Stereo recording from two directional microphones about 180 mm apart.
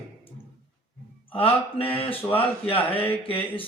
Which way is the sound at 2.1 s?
10° left (ahead or behind).